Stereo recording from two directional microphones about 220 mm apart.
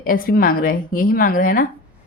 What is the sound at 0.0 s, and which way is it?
A woman's voice, 40° left (ahead or behind).